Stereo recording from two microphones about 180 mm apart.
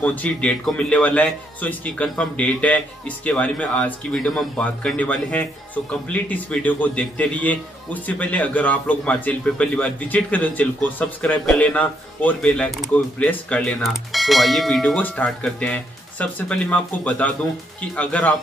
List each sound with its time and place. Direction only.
0.0 s a man's voice: 10° left (ahead or behind)